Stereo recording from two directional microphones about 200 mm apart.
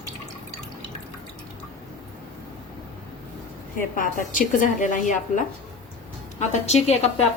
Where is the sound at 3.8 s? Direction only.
40° left (ahead or behind).